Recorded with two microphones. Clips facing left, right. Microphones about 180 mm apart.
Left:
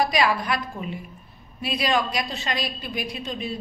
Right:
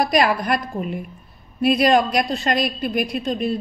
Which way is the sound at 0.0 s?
50° right (ahead or behind).